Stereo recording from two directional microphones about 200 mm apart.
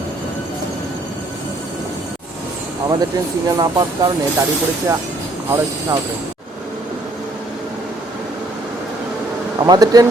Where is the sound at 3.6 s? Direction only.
15° right (ahead or behind).